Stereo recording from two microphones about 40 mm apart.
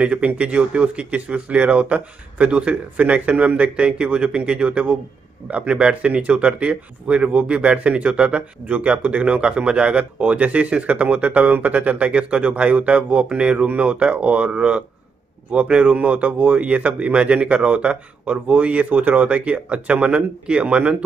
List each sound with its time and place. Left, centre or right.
0.0 s speech: right